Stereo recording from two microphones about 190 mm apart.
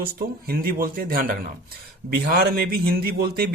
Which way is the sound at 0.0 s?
50° right (ahead or behind).